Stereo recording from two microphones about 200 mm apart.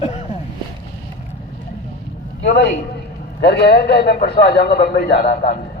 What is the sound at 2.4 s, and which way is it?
A man's voice, 60° left (ahead or behind).